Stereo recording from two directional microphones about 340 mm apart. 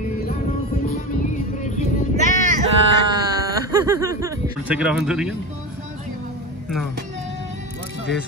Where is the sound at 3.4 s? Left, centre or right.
Centre.